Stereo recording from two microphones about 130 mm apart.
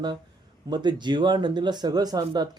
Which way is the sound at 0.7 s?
35° right (ahead or behind).